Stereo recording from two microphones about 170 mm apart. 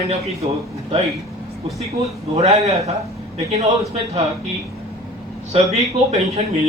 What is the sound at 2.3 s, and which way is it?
Speech, 40° right (ahead or behind).